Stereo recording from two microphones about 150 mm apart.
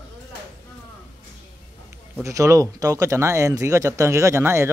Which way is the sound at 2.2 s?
20° right (ahead or behind).